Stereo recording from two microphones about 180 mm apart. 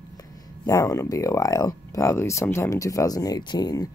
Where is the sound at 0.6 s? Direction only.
20° left (ahead or behind).